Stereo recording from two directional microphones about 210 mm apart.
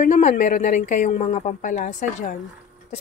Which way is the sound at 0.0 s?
35° left (ahead or behind).